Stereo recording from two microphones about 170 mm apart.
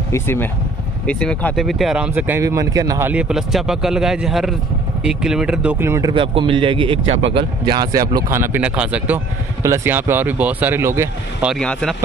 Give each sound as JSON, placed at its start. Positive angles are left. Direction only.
{"t": 0.1, "sound": "speech", "side_deg": 15}
{"t": 3.1, "sound": "speech", "side_deg": -5}
{"t": 6.1, "sound": "speech", "side_deg": -30}
{"t": 11.5, "sound": "speech", "side_deg": 5}